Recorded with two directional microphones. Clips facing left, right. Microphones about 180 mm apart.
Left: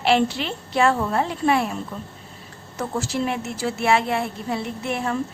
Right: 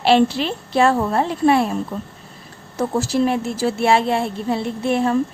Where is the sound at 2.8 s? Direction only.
35° right (ahead or behind).